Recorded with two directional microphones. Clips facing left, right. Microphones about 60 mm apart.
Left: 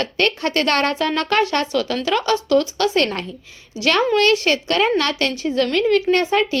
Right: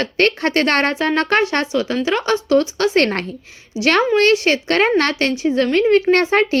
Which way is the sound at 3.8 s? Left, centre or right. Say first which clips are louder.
Right 3 dB; right.